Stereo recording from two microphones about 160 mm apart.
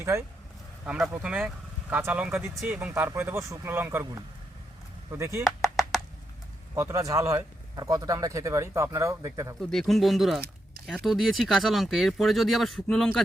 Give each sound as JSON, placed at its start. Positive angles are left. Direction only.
{"t": 0.0, "sound": "speech", "side_deg": -15}
{"t": 0.9, "sound": "speech", "side_deg": 0}
{"t": 1.1, "sound": "speech", "side_deg": -10}
{"t": 5.4, "sound": "clapping", "side_deg": 0}
{"t": 6.7, "sound": "speech", "side_deg": -20}
{"t": 9.6, "sound": "speech", "side_deg": 0}